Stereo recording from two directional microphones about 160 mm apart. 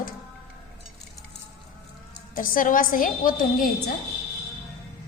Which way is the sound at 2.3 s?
60° left (ahead or behind).